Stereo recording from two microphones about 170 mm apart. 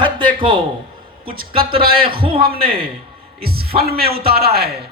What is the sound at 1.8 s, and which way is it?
Speech, 60° right (ahead or behind).